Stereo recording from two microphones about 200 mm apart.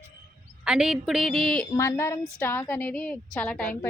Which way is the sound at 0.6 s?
5° right (ahead or behind).